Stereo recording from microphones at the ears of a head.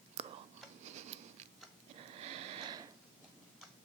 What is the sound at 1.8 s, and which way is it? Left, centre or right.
Sniff, right.